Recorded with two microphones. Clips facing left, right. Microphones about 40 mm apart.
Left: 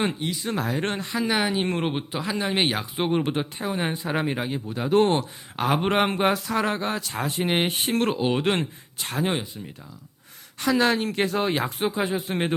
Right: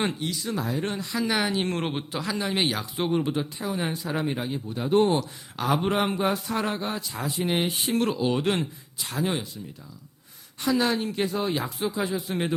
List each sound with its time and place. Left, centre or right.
0.1 s speech: left
0.4 s speech: left
1.3 s speech: centre; by 4.1 s left
4.1 s speech: left
5.1 s speech: left
6.1 s a sound: left
7.1 s speech: left
8.5 s speech: left
9.2 s speech: left
10.6 s speech: left
11.8 s speech: left